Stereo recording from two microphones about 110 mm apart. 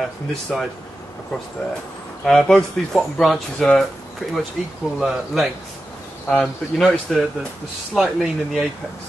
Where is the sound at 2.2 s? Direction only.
5° left (ahead or behind).